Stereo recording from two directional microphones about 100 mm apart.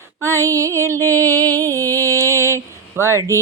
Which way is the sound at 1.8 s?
35° right (ahead or behind).